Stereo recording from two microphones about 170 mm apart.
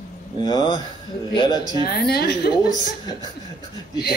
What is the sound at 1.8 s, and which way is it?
Speech, 65° left (ahead or behind).